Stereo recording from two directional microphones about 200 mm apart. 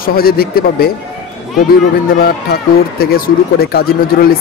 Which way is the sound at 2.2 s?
50° left (ahead or behind).